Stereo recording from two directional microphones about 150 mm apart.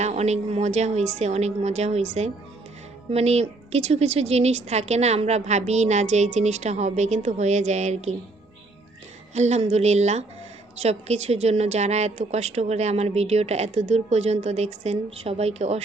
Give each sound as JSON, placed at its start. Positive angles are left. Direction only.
{"t": 0.0, "sound": "a woman's voice", "side_deg": -50}
{"t": 9.3, "sound": "a woman's voice", "side_deg": -50}